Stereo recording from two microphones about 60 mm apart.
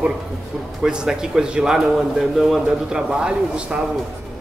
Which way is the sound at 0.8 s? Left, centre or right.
Centre.